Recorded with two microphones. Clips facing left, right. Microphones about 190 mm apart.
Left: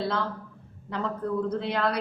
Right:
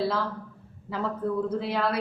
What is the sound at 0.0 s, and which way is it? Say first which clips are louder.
Speech: right 1 dB; 5° right (ahead or behind).